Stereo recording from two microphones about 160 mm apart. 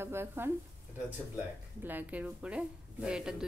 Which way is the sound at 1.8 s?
10° right (ahead or behind).